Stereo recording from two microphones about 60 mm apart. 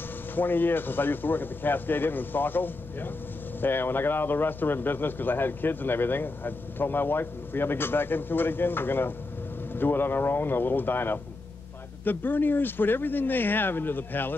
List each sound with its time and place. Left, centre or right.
0.4 s a man's voice: left